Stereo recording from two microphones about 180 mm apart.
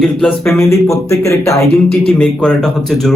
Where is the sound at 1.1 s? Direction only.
15° left (ahead or behind).